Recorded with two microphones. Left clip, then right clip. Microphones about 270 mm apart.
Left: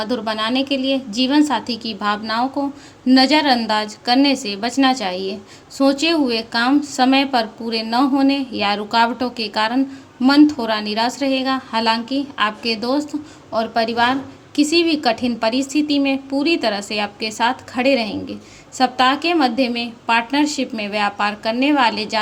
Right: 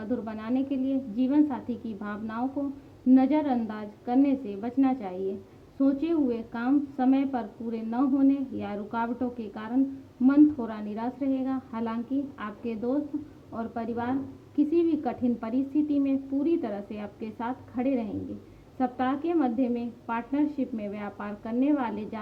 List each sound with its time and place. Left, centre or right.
0.3 s a woman's voice: centre